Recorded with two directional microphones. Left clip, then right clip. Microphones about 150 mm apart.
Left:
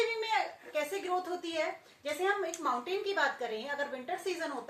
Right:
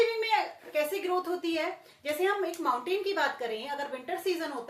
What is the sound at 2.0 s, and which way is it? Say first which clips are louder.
A woman's voice: right 3 dB; 20° right (ahead or behind).